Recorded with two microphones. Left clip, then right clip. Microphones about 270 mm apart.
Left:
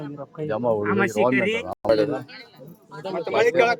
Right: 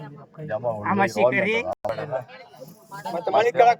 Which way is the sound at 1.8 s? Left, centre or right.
Left.